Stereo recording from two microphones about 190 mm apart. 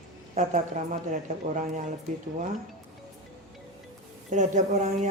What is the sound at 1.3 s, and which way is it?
Speech, 40° right (ahead or behind).